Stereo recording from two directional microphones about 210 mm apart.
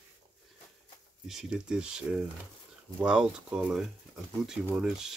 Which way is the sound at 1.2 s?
5° right (ahead or behind).